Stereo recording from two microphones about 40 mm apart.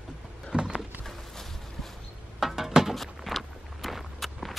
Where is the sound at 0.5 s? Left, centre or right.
Right.